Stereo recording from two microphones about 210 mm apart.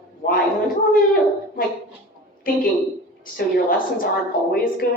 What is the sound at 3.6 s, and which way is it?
Speech, 40° left (ahead or behind).